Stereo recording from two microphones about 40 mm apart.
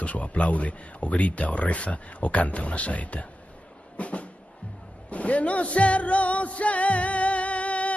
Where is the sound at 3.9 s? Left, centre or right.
Left.